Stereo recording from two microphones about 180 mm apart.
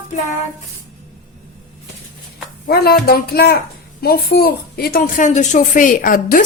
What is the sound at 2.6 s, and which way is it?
A woman's voice, 60° left (ahead or behind).